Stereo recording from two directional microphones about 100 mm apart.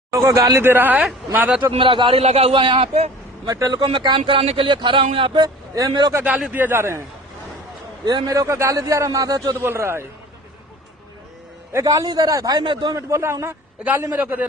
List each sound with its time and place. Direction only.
0.1 s a man's voice: 30° right (ahead or behind); by 1.7 s 15° right (ahead or behind)
1.7 s a man's voice: 60° right (ahead or behind); by 2.6 s 85° right
2.6 s a man's voice: 60° right (ahead or behind); by 3.1 s 80° right
3.4 s a man's voice: 40° right (ahead or behind)
3.8 s speech: 55° right (ahead or behind)
5.9 s speech: 45° right (ahead or behind)
6.2 s a man's voice: 15° right (ahead or behind)
8.0 s a man's voice: 40° right (ahead or behind)
9.6 s a man's voice: 25° right (ahead or behind)
11.7 s a man's voice: 35° right (ahead or behind); by 12.9 s 50° right (ahead or behind)
12.9 s a man's voice: 30° right (ahead or behind)